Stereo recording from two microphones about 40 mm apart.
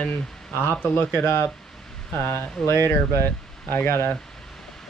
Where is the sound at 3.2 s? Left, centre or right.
Left.